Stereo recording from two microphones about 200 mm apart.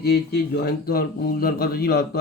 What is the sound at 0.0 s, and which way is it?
A man's voice, 50° left (ahead or behind).